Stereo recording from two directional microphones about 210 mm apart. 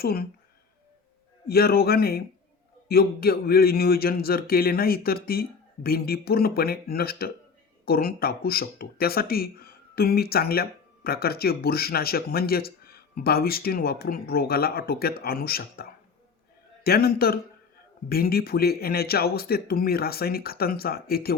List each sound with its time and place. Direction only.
0.0 s speech: 45° left (ahead or behind)
1.5 s speech: 45° left (ahead or behind)